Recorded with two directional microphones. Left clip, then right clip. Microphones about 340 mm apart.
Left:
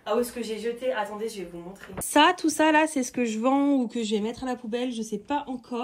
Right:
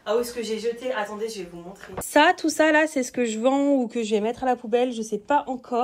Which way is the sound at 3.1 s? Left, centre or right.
Left.